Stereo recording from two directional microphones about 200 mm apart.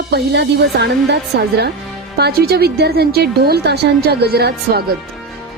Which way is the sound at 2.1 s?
50° right (ahead or behind).